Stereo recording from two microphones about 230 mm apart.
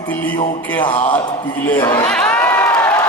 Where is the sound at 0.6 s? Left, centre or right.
Centre.